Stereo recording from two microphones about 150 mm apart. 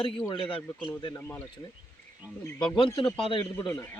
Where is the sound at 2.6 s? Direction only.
30° left (ahead or behind).